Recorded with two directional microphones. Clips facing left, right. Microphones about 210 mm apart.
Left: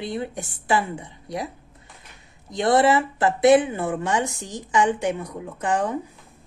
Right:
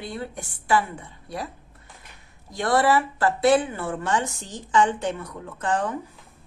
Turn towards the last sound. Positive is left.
turn(degrees=15)  # may be behind; listen again after turning